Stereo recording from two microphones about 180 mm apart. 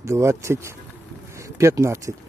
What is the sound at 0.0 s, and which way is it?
Speech, 15° right (ahead or behind).